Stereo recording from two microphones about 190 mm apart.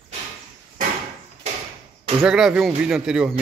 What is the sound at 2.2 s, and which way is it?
Speech, 5° right (ahead or behind).